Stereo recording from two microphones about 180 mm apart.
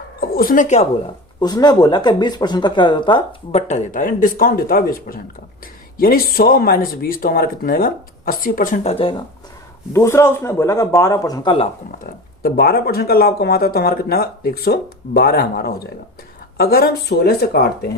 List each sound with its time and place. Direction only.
0.2 s a woman's voice: 55° left (ahead or behind)
1.4 s speech: 25° left (ahead or behind)
3.7 s speech: 45° left (ahead or behind)
9.9 s speech: 15° left (ahead or behind)
12.0 s speech: 55° left (ahead or behind)